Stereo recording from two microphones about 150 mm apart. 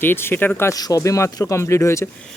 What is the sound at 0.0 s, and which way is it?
Speech, 15° left (ahead or behind).